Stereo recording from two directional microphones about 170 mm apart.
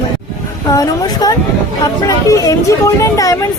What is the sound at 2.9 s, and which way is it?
Speech, 20° left (ahead or behind).